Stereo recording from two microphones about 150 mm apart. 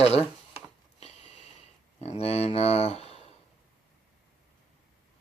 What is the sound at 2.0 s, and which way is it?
Speech, 45° left (ahead or behind).